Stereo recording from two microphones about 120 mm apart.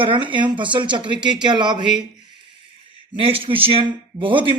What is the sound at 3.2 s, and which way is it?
Speech, 50° right (ahead or behind).